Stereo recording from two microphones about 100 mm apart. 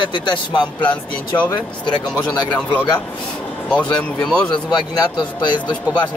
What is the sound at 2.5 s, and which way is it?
Speech, 15° left (ahead or behind).